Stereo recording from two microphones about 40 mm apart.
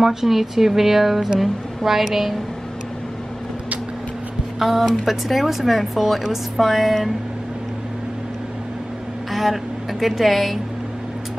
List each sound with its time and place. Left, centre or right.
0.0 s speech: centre
4.6 s speech: centre
9.3 s a woman's voice: centre